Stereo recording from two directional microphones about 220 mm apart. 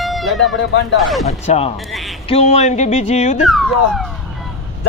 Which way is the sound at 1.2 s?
30° left (ahead or behind).